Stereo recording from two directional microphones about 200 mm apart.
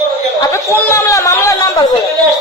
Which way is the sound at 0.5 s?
15° left (ahead or behind).